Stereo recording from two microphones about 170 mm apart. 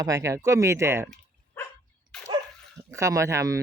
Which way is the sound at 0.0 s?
20° right (ahead or behind).